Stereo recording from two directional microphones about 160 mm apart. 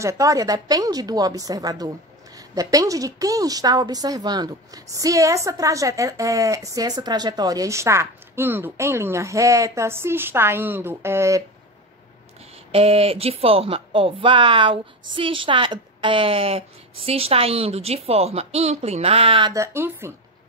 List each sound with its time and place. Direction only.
0.0 s a woman's voice: 20° right (ahead or behind)
12.7 s speech: 40° right (ahead or behind)
19.5 s speech: 15° right (ahead or behind)